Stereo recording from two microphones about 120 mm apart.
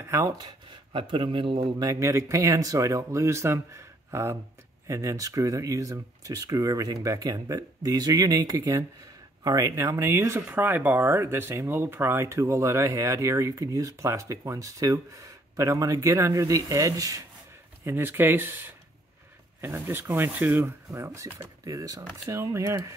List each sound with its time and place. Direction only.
0.0 s speech: 30° right (ahead or behind); by 1.7 s 50° right (ahead or behind)
1.8 s speech: 25° right (ahead or behind)